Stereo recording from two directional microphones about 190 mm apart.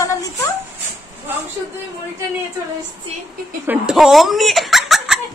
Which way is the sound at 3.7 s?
Centre (ahead or behind).